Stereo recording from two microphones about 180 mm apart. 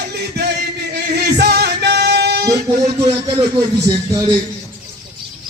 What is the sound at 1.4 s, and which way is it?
Music, 65° right (ahead or behind).